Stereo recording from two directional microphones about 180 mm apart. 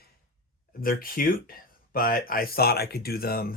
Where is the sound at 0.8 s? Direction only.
55° left (ahead or behind).